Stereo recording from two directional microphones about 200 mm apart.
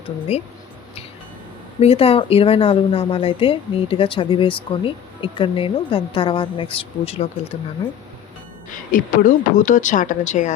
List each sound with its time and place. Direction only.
1.8 s speech: 30° left (ahead or behind)
8.7 s speech: 45° left (ahead or behind)